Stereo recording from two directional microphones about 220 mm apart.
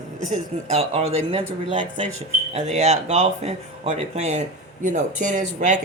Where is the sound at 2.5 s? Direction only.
30° right (ahead or behind).